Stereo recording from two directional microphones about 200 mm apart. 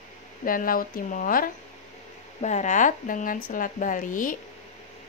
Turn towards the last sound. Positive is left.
turn(degrees=40)  # may be behind; listen again after turning